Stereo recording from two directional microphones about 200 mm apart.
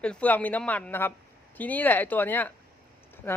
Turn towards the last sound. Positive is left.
turn(degrees=10)  # may be behind; listen again after turning